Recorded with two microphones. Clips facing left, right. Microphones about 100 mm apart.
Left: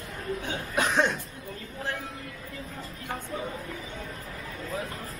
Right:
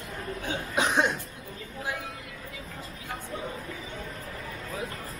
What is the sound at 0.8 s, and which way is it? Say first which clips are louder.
Speech: even; 15° right (ahead or behind).